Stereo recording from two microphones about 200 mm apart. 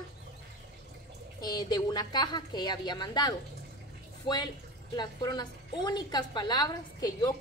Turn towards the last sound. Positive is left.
turn(degrees=20)  # may be behind; listen again after turning